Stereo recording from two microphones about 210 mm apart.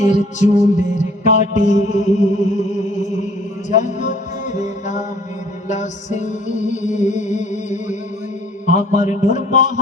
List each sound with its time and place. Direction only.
0.0 s music: 35° left (ahead or behind)